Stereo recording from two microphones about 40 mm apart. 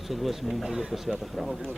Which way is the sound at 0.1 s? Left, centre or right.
Centre.